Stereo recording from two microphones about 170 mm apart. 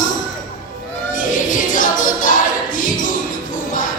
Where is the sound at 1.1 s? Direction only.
50° left (ahead or behind).